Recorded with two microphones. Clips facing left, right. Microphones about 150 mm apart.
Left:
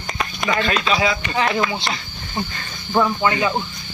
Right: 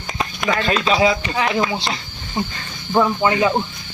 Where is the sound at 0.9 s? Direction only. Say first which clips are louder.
Right 5 dB; 30° right (ahead or behind).